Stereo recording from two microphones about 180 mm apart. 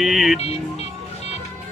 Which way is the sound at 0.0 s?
Centre (ahead or behind).